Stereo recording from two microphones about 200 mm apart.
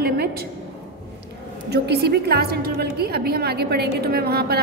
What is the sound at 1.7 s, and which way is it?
A woman's voice, 55° right (ahead or behind).